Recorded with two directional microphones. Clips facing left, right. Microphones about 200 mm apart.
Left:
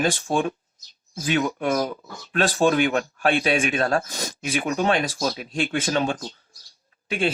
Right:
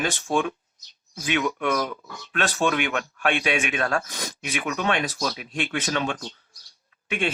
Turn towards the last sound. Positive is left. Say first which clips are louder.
# left 3 dB
turn(degrees=35)  # may be behind; listen again after turning